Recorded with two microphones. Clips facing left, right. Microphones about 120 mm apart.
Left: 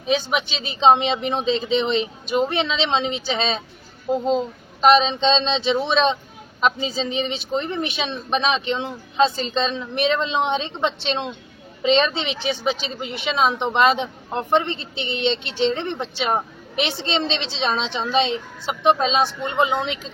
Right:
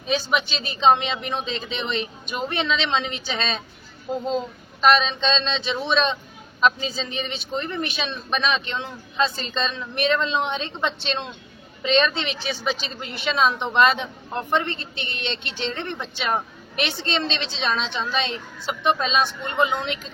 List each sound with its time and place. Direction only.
0.3 s a woman's voice: 25° left (ahead or behind)